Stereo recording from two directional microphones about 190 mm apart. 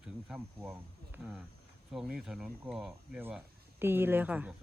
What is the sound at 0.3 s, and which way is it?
Speech, 10° right (ahead or behind).